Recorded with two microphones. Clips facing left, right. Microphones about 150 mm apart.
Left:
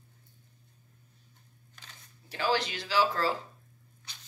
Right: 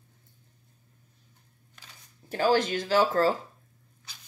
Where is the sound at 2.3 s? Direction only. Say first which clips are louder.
Right 6 dB; 45° right (ahead or behind).